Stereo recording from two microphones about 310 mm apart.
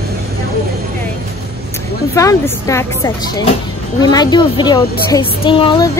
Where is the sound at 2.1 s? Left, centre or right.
Centre.